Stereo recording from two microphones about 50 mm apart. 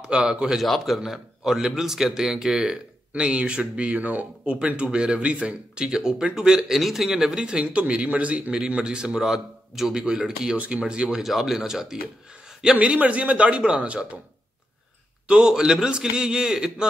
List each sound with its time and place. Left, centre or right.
0.0 s a man's voice: centre
0.6 s a man's voice: centre
12.7 s speech: right
15.2 s a man's voice: centre